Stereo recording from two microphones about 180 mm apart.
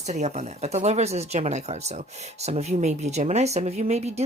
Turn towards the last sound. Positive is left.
turn(degrees=-35)  # may be behind; listen again after turning